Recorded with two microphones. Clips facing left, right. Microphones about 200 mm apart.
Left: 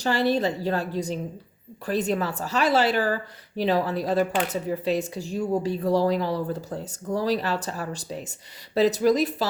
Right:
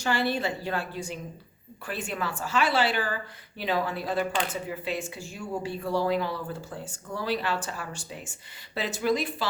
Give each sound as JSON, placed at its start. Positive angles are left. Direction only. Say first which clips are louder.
{"t": 0.0, "sound": "speech", "louder": "left 5 dB", "side_deg": 40}